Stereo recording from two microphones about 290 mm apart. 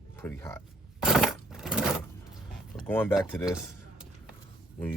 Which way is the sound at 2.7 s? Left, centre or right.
Centre.